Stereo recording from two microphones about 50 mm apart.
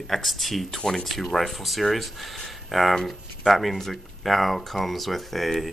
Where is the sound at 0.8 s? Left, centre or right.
Centre.